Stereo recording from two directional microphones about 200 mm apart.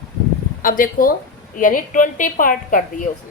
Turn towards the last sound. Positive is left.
turn(degrees=40)  # may be behind; listen again after turning